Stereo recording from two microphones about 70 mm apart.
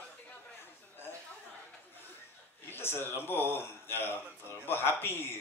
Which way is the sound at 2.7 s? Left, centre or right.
Left.